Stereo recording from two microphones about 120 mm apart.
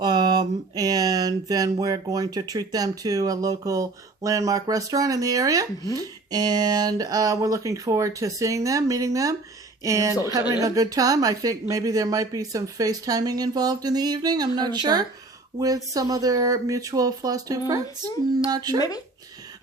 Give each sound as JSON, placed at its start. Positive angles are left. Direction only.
{"t": 0.0, "sound": "a woman's voice", "side_deg": -35}
{"t": 18.8, "sound": "speech", "side_deg": 30}